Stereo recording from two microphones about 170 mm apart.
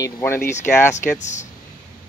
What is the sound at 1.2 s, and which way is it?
Speech, 45° left (ahead or behind).